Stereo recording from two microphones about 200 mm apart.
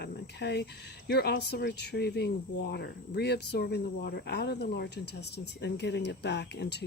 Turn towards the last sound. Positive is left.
turn(degrees=60)  # may be behind; listen again after turning